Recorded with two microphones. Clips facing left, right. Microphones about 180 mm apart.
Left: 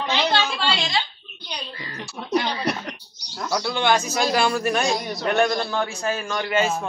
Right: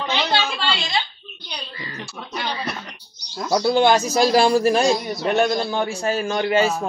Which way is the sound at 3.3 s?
20° right (ahead or behind).